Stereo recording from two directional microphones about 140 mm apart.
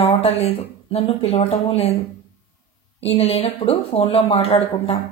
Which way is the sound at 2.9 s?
45° left (ahead or behind).